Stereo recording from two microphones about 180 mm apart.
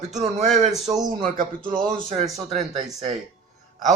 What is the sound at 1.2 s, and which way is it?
A man's voice, 50° right (ahead or behind).